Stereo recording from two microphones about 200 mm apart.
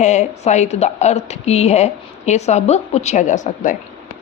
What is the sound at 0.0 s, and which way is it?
A woman's voice, 35° left (ahead or behind).